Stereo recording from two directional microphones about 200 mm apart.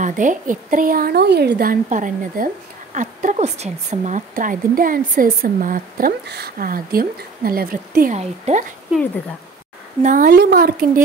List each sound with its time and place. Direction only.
0.0 s speech: 40° right (ahead or behind)
8.2 s speech: 35° right (ahead or behind)
10.0 s speech: 45° right (ahead or behind)